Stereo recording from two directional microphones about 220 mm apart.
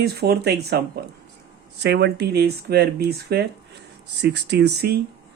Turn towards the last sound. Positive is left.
turn(degrees=-50)  # may be behind; listen again after turning